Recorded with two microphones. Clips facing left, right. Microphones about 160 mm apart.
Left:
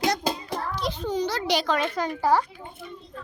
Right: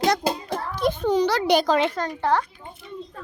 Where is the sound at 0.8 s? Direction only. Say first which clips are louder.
Right 8 dB; 60° right (ahead or behind); by 1.5 s 80° right.